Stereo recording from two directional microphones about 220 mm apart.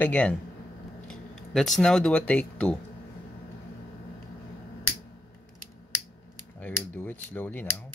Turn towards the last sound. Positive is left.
turn(degrees=10)  # may be behind; listen again after turning